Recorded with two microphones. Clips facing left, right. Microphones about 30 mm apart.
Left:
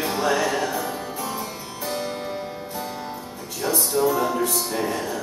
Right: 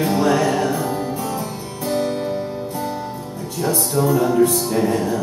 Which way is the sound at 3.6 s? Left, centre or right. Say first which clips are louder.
Right 2 dB; centre.